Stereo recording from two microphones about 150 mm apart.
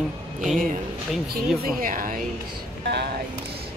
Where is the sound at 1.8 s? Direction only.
65° right (ahead or behind).